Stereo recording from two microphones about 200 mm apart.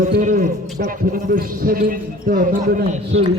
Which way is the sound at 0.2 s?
40° right (ahead or behind).